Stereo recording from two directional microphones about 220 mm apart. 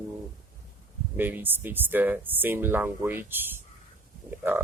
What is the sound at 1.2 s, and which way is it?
Speech, 10° right (ahead or behind).